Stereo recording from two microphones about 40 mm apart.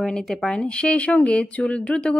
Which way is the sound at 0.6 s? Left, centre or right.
Left.